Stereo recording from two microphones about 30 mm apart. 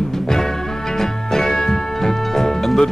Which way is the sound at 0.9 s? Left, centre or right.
Centre.